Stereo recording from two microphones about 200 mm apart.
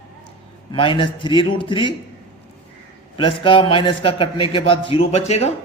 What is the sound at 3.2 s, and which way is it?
A man's voice, 25° left (ahead or behind).